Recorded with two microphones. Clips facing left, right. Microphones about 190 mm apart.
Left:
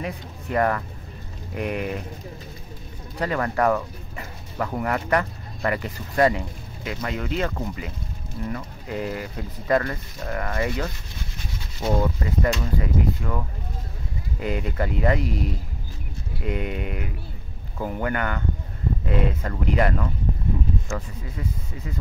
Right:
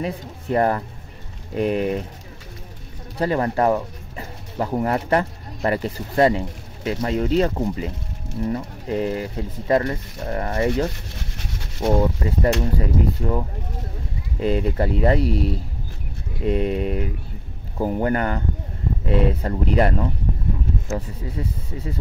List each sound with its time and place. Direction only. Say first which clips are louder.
0.0 s speech: right 4 dB; 30° right (ahead or behind)
3.2 s speech: right 3 dB; 30° right (ahead or behind)